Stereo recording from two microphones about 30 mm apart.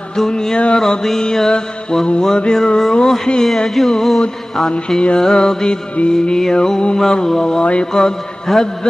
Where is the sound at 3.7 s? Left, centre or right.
Centre.